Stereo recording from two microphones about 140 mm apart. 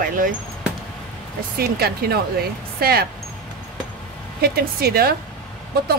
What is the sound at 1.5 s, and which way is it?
Speech, 90° right.